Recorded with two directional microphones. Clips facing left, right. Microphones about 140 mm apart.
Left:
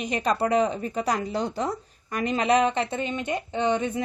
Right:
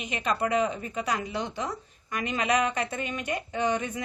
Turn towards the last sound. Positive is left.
turn(degrees=25)  # may be behind; listen again after turning